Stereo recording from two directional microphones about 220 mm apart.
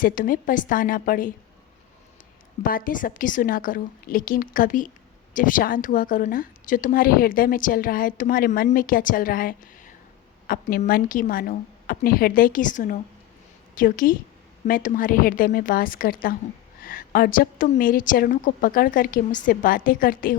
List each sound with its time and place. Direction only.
0.0 s a woman's voice: 40° left (ahead or behind)
2.6 s a woman's voice: 40° left (ahead or behind)